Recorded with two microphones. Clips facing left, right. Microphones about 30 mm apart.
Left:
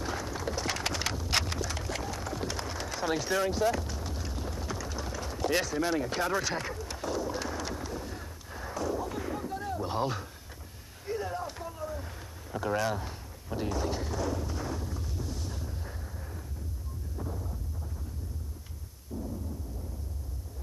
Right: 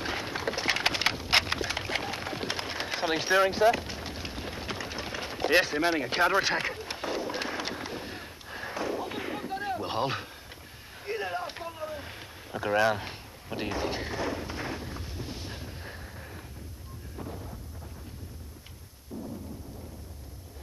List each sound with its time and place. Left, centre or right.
0.0 s wood: right
11.1 s a sound: right
12.9 s artillery fire: right